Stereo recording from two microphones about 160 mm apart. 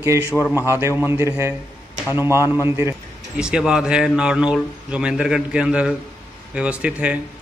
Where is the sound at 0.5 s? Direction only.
15° right (ahead or behind).